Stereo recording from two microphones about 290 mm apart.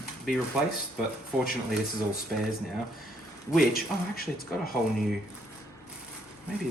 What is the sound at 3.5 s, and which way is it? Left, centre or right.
Speech, left.